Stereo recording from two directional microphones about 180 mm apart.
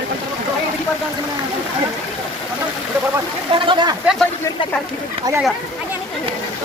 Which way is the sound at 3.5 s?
30° right (ahead or behind).